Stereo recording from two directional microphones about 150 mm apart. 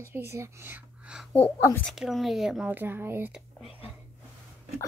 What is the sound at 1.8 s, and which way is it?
Speech, centre (ahead or behind).